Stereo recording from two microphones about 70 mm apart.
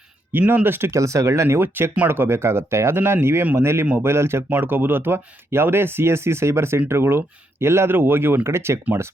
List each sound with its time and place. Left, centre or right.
0.3 s speech: right
0.9 s speech: right